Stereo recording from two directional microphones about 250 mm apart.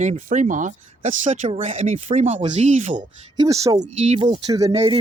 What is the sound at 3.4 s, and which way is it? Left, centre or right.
Speech, centre.